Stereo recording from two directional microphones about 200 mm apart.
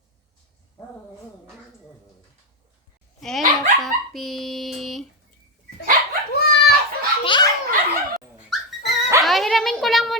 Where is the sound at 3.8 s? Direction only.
Centre (ahead or behind).